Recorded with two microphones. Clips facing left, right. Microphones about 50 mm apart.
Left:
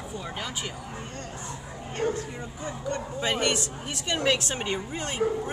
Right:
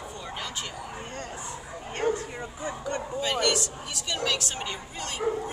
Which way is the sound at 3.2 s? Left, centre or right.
Left.